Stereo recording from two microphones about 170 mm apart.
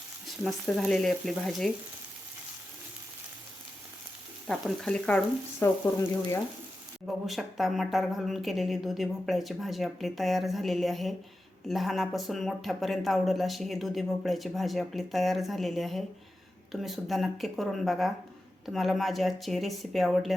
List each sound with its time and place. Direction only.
0.4 s speech: centre (ahead or behind)
4.4 s speech: centre (ahead or behind)
7.3 s speech: centre (ahead or behind)